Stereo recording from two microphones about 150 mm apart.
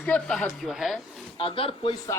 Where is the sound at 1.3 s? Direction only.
35° left (ahead or behind).